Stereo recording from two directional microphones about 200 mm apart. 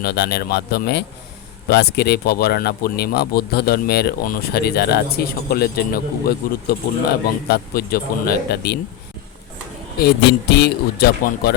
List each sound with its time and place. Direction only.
0.0 s speech: 55° left (ahead or behind)
10.0 s speech: 55° left (ahead or behind)